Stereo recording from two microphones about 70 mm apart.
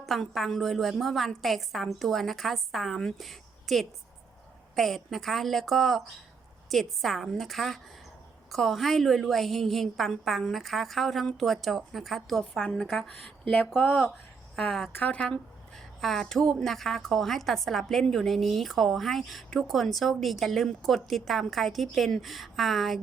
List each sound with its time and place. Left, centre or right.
0.0 s a woman's voice: centre
14.9 s a woman's voice: centre
16.0 s a woman's voice: centre